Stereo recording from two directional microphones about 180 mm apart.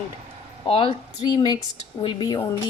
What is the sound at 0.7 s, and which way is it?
Speech, 30° left (ahead or behind).